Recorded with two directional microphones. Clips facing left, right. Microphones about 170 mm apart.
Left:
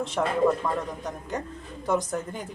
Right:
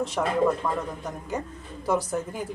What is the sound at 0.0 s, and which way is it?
Speech, 5° right (ahead or behind).